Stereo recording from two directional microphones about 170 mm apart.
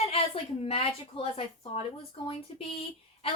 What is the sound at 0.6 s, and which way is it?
A woman's voice, 35° left (ahead or behind).